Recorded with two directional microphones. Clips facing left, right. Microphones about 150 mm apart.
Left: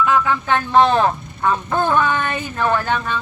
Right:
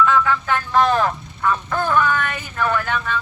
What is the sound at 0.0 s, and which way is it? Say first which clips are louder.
Speech: even; 15° left (ahead or behind).